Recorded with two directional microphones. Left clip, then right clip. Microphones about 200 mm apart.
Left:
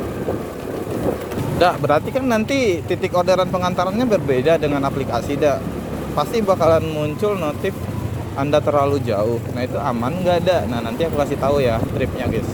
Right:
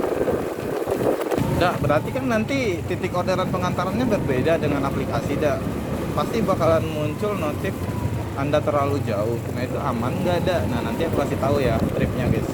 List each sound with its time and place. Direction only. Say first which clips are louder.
1.5 s speech: left 7 dB; 60° left (ahead or behind)